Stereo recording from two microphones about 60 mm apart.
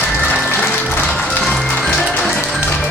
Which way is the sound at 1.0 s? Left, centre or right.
Centre.